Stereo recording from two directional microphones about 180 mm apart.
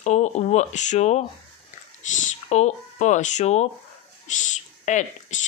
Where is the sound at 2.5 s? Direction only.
40° left (ahead or behind).